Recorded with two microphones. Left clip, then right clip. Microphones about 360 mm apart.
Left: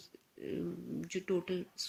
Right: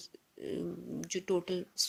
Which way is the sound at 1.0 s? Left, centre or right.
Centre.